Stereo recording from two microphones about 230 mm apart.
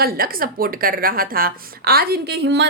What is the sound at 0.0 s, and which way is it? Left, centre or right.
A woman's voice, right.